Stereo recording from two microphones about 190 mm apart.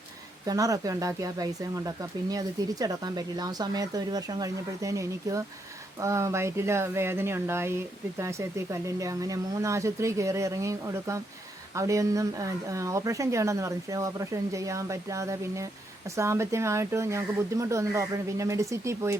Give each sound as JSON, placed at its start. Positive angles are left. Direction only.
{"t": 0.4, "sound": "speech", "side_deg": -20}